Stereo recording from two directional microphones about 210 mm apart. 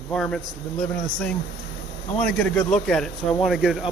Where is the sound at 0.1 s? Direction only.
5° left (ahead or behind).